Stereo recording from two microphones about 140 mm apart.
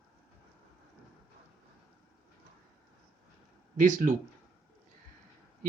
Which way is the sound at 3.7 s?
65° right (ahead or behind).